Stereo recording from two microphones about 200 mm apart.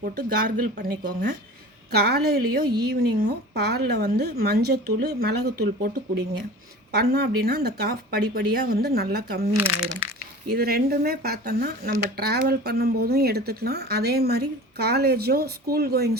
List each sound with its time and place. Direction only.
0.0 s speech: 45° right (ahead or behind)
9.6 s speech: 10° right (ahead or behind)
10.5 s speech: 50° right (ahead or behind)